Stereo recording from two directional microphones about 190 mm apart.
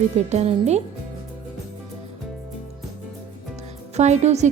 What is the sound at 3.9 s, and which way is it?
Speech, 35° right (ahead or behind).